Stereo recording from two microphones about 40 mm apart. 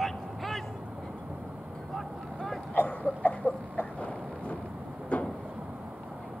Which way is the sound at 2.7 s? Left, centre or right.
Left.